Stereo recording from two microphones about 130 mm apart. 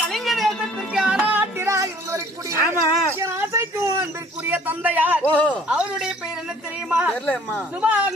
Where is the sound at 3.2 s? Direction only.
20° right (ahead or behind).